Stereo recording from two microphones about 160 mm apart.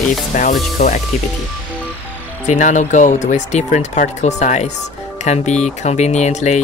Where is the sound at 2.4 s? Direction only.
50° left (ahead or behind).